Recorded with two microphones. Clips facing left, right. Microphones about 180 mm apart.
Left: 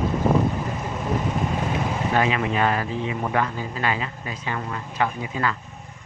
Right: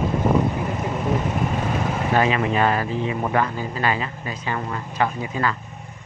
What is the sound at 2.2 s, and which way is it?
Speech, 40° right (ahead or behind).